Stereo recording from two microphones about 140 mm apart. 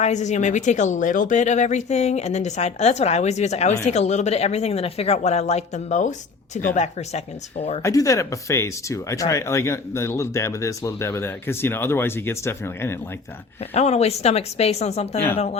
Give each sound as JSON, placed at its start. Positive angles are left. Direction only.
{"t": 0.0, "sound": "a woman's voice", "side_deg": 55}
{"t": 7.8, "sound": "speech", "side_deg": 20}
{"t": 13.7, "sound": "speech", "side_deg": 50}